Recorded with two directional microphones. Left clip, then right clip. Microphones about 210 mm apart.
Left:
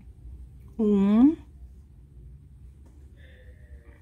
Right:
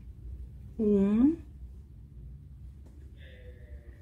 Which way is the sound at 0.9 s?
30° left (ahead or behind).